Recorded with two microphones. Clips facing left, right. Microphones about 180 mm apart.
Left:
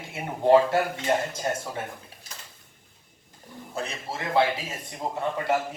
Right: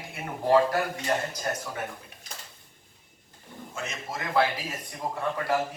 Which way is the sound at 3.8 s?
30° left (ahead or behind).